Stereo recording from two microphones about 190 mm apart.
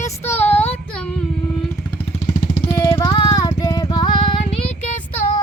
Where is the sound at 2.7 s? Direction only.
15° left (ahead or behind); by 5.0 s 35° left (ahead or behind).